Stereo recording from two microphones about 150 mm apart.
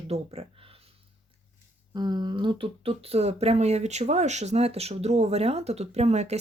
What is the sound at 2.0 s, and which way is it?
Speech, 30° right (ahead or behind).